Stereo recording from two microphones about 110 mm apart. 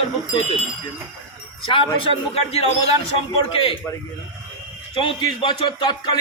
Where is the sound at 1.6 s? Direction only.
50° left (ahead or behind).